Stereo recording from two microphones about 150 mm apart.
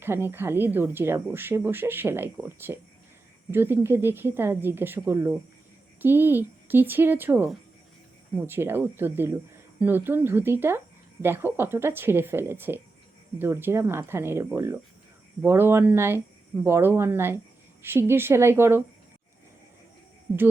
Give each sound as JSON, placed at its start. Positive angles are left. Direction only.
{"t": 0.0, "sound": "speech", "side_deg": -15}